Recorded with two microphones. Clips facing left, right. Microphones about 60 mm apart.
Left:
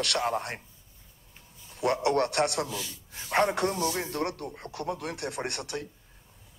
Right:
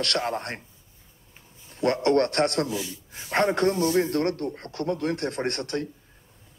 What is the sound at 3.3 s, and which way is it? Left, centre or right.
Speech, centre.